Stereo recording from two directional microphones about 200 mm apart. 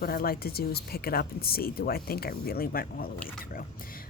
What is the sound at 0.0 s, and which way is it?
Speech, 50° left (ahead or behind).